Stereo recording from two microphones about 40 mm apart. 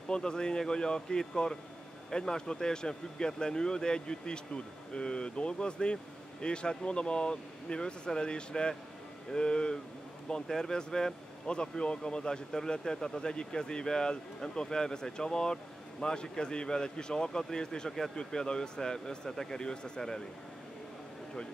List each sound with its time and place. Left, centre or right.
0.1 s speech: centre